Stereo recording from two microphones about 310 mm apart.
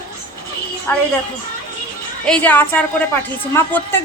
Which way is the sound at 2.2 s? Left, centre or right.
Centre.